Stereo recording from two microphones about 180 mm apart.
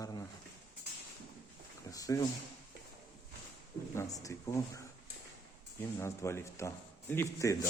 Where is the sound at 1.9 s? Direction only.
20° left (ahead or behind).